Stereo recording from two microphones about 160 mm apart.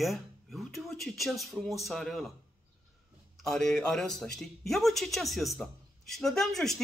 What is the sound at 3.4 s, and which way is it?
Speech, 5° left (ahead or behind).